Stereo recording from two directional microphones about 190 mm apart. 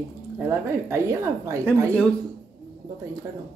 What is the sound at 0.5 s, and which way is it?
Speech, 15° right (ahead or behind).